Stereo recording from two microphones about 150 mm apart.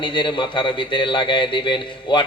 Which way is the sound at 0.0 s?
35° left (ahead or behind).